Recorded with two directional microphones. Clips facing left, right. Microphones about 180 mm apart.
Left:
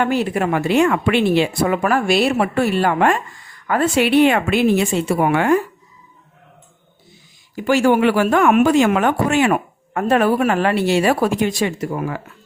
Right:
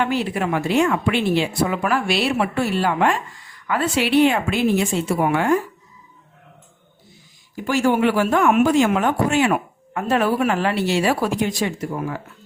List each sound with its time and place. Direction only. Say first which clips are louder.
0.0 s a woman's voice: left 3 dB; 50° left (ahead or behind); by 5.5 s 65° left (ahead or behind)
7.5 s speech: left 4 dB; 75° left (ahead or behind); by 11.3 s 50° left (ahead or behind)
11.6 s speech: left 3 dB; 75° left (ahead or behind)